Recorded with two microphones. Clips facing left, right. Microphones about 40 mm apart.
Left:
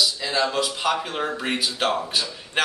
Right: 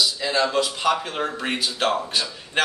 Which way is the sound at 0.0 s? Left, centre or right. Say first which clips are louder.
Right 1 dB; centre.